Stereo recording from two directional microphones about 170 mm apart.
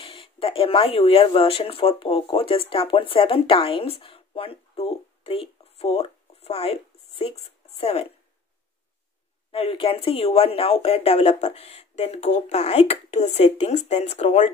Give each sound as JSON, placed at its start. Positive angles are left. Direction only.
{"t": 0.0, "sound": "speech", "side_deg": 30}
{"t": 9.5, "sound": "speech", "side_deg": 35}